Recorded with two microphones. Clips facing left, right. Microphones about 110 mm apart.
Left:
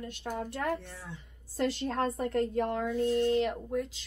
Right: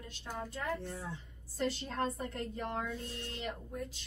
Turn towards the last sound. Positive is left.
turn(degrees=90)